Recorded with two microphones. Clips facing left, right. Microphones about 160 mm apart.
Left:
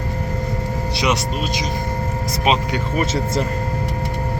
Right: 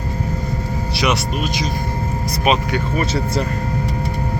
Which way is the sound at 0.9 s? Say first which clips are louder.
Right 1 dB; 20° left (ahead or behind).